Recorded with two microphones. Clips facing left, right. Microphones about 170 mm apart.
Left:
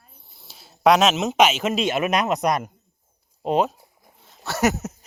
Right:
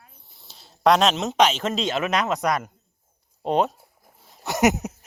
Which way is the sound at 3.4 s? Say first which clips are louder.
Left 1 dB; 5° left (ahead or behind).